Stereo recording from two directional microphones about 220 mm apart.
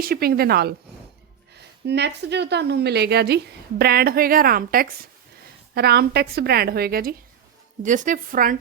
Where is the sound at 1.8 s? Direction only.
50° right (ahead or behind).